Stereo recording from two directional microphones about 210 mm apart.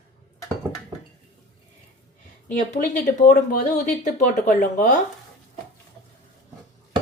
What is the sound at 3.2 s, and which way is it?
Speech, 40° left (ahead or behind).